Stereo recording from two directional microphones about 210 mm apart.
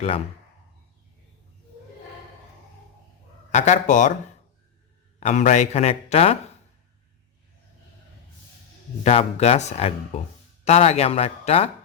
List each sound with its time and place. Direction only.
3.5 s speech: 35° left (ahead or behind)
5.2 s speech: 35° left (ahead or behind)
9.0 s speech: 30° left (ahead or behind)